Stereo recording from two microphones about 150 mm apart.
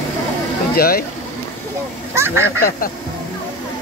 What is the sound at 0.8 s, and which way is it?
Speech, 85° left.